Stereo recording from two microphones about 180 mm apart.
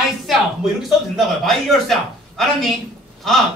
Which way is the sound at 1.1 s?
Centre (ahead or behind).